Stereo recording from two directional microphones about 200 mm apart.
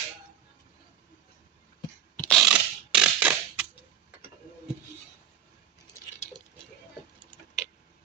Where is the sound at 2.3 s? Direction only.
Centre (ahead or behind).